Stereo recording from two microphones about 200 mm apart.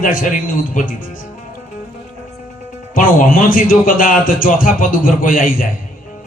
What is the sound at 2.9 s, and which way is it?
A man's voice, 45° left (ahead or behind).